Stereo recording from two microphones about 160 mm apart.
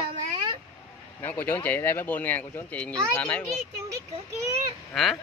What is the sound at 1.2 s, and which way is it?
Speech, 10° left (ahead or behind).